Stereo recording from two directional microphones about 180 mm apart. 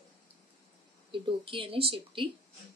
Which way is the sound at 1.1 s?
30° right (ahead or behind).